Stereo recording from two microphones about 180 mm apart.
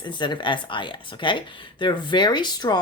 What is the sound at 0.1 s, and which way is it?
Speech, 25° left (ahead or behind).